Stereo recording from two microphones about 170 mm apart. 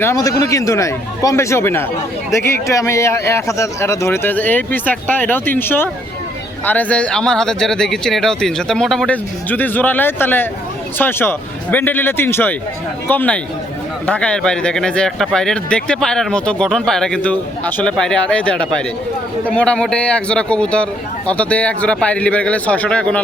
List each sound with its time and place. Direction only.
0.0 s speech: 20° left (ahead or behind)